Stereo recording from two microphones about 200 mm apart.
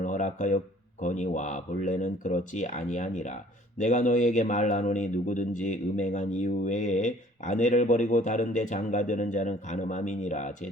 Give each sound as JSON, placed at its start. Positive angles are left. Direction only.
{"t": 0.0, "sound": "speech", "side_deg": 40}